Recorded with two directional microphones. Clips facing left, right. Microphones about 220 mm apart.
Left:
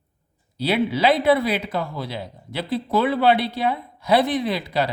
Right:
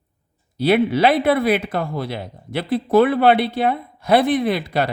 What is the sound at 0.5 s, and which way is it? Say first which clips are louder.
Speech: right 5 dB; 50° right (ahead or behind).